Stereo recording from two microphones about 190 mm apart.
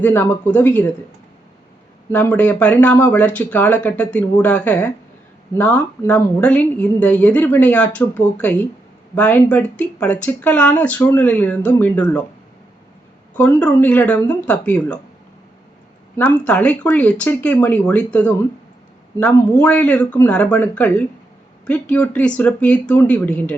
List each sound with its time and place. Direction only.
0.0 s a woman's voice: 10° left (ahead or behind)
2.1 s a woman's voice: 10° left (ahead or behind)
13.3 s a woman's voice: 5° left (ahead or behind)
16.1 s a woman's voice: 10° left (ahead or behind)